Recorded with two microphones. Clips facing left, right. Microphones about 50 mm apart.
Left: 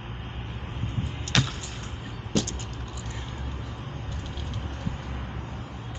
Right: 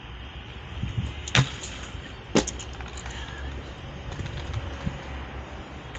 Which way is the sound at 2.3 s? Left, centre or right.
Right.